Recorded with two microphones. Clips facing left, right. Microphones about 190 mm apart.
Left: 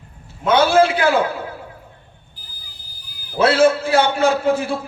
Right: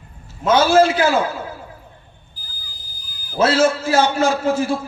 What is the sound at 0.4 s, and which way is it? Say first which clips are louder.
A man's voice: right 1 dB; 60° left (ahead or behind).